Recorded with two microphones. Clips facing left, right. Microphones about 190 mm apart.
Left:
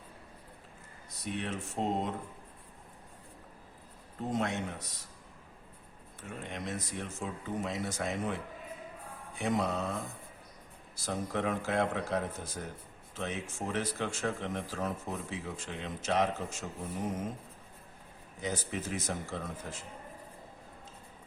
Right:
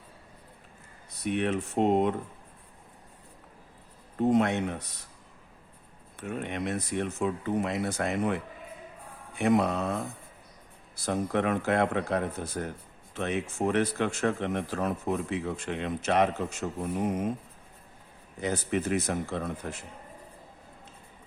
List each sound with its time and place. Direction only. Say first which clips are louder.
1.2 s speech: right 9 dB; 65° right (ahead or behind)
4.2 s speech: right 9 dB; 65° right (ahead or behind)
6.1 s speech: right 8 dB; 65° right (ahead or behind)
9.4 s speech: right 7 dB; 65° right (ahead or behind)
18.3 s speech: right 7 dB; 60° right (ahead or behind)